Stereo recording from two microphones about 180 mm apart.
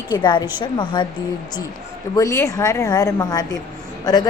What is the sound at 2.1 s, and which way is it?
A woman's voice, 15° left (ahead or behind).